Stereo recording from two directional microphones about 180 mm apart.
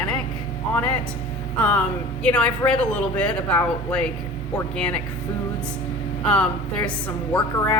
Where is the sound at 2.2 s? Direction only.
5° left (ahead or behind).